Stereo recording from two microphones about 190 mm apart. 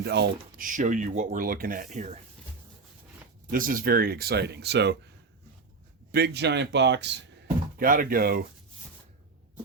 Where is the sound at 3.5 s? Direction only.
45° right (ahead or behind); by 5.0 s 60° right (ahead or behind).